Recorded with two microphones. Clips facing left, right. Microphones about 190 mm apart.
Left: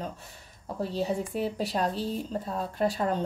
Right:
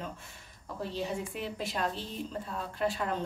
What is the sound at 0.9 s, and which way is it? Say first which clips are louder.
A woman's voice: left 6 dB; 35° left (ahead or behind).